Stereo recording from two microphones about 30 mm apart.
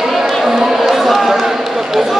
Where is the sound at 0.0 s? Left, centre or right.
Centre.